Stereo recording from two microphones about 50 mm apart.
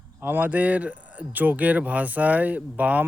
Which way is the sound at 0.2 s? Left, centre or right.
Right.